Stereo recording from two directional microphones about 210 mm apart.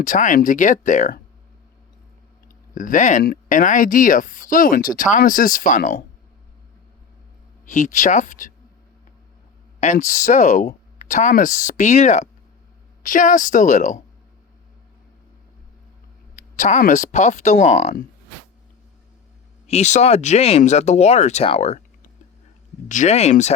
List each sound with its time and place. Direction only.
0.0 s speech: 40° left (ahead or behind)
2.7 s speech: 40° left (ahead or behind)
7.7 s speech: 35° left (ahead or behind)
9.8 s speech: 35° left (ahead or behind)
16.3 s speech: 35° left (ahead or behind)
19.6 s speech: 30° left (ahead or behind)